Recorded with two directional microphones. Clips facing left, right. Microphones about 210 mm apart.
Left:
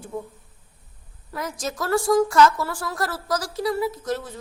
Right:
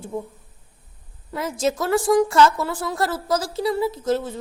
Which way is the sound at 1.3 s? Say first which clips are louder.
Right 7 dB; 25° right (ahead or behind).